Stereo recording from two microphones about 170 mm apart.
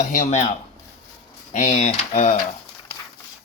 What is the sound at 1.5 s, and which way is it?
Speech, 40° left (ahead or behind).